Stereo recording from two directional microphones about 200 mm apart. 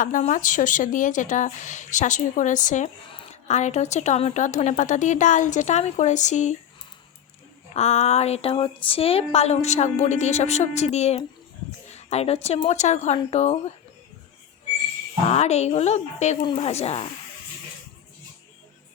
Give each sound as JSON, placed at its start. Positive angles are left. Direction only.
{"t": 0.0, "sound": "a woman's voice", "side_deg": 40}
{"t": 7.7, "sound": "a woman's voice", "side_deg": 35}
{"t": 15.3, "sound": "a woman's voice", "side_deg": 35}